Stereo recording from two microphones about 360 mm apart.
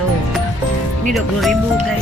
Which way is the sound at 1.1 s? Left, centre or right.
Centre.